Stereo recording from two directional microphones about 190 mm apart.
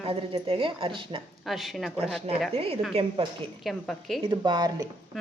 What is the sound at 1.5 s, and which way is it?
Speech, centre (ahead or behind).